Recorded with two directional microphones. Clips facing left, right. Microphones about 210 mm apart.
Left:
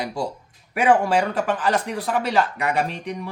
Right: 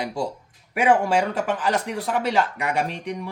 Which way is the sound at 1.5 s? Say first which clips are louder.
Left 1 dB; 15° right (ahead or behind).